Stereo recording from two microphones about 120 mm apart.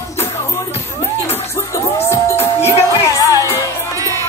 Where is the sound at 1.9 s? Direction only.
20° left (ahead or behind).